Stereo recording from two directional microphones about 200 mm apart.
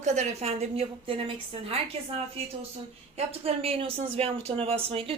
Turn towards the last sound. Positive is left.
turn(degrees=-30)  # may be behind; listen again after turning